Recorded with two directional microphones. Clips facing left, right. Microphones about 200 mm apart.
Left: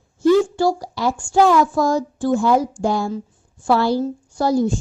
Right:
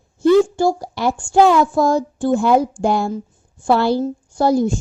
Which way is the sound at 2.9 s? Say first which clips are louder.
Right 3 dB; 60° right (ahead or behind).